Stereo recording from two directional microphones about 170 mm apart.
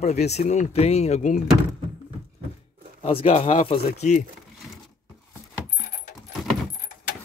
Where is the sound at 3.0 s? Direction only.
35° left (ahead or behind).